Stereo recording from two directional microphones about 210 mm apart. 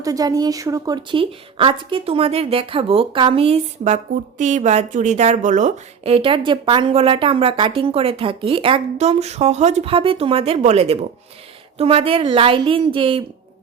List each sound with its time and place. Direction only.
0.0 s speech: 15° right (ahead or behind)